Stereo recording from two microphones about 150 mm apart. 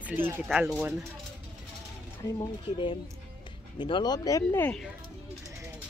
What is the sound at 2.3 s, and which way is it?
Speech, 35° left (ahead or behind).